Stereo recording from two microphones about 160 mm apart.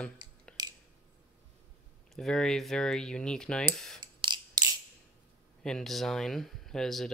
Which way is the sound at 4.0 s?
30° right (ahead or behind).